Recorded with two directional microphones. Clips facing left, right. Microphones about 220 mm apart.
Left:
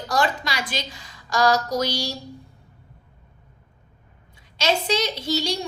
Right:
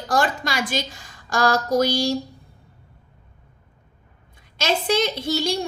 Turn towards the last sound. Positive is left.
turn(degrees=-50)  # may be behind; listen again after turning